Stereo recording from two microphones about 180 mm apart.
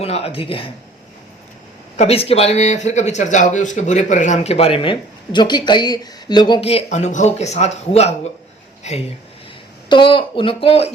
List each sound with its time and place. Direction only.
0.0 s a man's voice: 35° left (ahead or behind)
2.0 s a man's voice: 35° left (ahead or behind)